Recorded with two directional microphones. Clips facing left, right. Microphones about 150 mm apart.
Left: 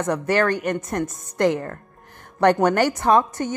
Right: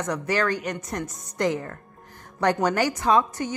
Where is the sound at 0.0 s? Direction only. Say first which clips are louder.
Left 5 dB; 55° left (ahead or behind).